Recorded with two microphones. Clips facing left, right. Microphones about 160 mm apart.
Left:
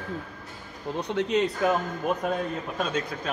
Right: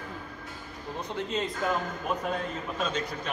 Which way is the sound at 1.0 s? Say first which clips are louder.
Left 7 dB; 75° left (ahead or behind).